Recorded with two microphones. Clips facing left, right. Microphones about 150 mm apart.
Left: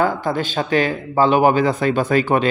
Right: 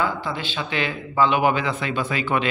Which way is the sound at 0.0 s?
45° left (ahead or behind).